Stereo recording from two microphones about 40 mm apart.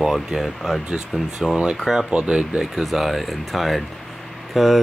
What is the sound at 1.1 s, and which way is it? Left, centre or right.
Speech, right.